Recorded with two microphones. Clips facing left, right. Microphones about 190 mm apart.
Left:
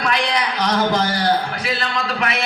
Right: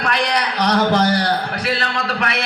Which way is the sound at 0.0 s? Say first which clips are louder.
Right 1 dB; 60° right (ahead or behind).